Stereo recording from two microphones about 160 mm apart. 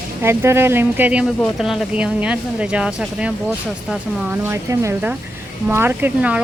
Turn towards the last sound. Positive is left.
turn(degrees=-10)  # may be behind; listen again after turning